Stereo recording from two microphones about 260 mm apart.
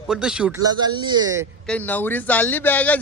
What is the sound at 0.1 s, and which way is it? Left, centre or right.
A man's voice, centre.